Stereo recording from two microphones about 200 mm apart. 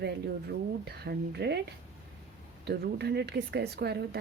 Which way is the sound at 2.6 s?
55° right (ahead or behind).